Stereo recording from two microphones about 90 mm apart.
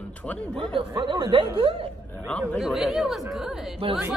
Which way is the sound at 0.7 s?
70° right (ahead or behind).